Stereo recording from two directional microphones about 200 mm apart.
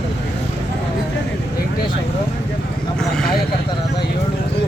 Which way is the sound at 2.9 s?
5° left (ahead or behind).